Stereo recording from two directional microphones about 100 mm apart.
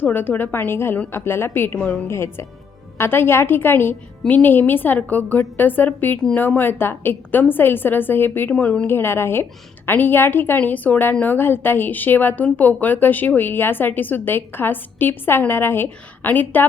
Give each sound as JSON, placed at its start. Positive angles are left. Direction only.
{"t": 0.0, "sound": "a woman's voice", "side_deg": 20}
{"t": 8.9, "sound": "a woman's voice", "side_deg": 25}